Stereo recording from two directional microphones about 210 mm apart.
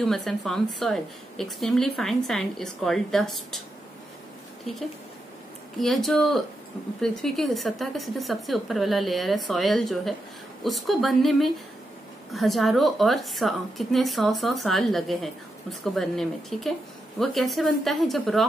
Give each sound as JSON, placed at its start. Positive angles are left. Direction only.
{"t": 0.0, "sound": "a woman's voice", "side_deg": 0}
{"t": 5.8, "sound": "a woman's voice", "side_deg": 0}